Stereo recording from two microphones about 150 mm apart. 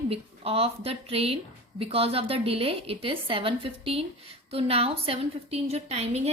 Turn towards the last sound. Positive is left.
turn(degrees=-45)  # may be behind; listen again after turning